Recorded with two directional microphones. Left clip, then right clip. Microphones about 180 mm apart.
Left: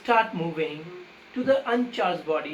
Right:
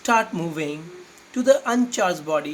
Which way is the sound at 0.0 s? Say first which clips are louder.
Right 2 dB; 60° right (ahead or behind).